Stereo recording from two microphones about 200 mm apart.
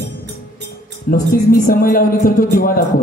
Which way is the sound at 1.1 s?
45° left (ahead or behind).